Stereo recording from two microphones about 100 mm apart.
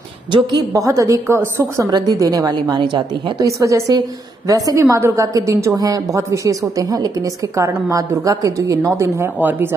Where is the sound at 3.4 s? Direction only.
30° right (ahead or behind).